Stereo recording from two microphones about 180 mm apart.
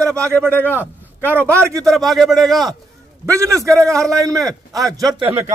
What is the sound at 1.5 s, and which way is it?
Speech, 15° right (ahead or behind).